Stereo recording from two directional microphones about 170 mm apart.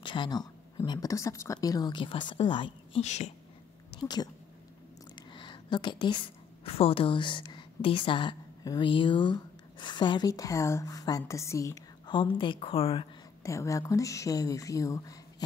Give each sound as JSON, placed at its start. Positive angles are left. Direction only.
{"t": 0.0, "sound": "a woman's voice", "side_deg": 25}
{"t": 3.0, "sound": "speech", "side_deg": 40}
{"t": 4.0, "sound": "a woman's voice", "side_deg": 25}
{"t": 5.1, "sound": "a sound", "side_deg": 25}
{"t": 6.6, "sound": "a woman's voice", "side_deg": 35}
{"t": 13.4, "sound": "a woman's voice", "side_deg": 20}